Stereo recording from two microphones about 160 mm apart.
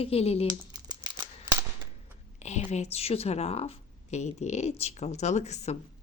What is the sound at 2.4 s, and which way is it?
Speech, 45° left (ahead or behind).